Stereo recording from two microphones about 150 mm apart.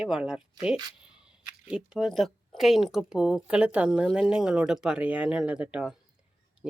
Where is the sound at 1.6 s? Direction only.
5° right (ahead or behind).